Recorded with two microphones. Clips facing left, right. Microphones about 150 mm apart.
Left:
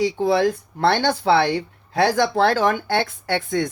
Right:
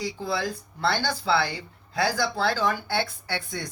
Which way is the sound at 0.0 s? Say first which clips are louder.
Left 11 dB; 65° left (ahead or behind).